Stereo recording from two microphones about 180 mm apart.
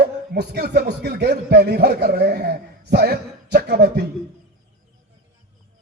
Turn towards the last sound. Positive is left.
turn(degrees=-65)  # may be behind; listen again after turning